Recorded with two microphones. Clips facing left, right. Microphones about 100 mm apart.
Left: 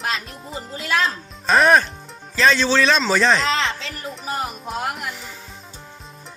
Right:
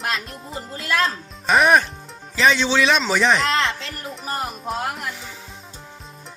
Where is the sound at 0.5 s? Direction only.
Centre (ahead or behind).